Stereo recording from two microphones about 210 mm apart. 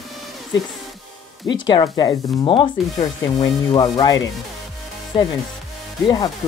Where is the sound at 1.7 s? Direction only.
20° left (ahead or behind).